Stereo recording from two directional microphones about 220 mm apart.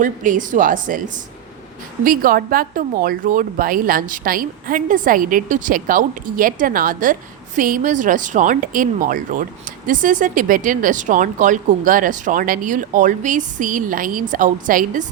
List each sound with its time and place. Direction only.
0.0 s a woman's voice: 35° right (ahead or behind)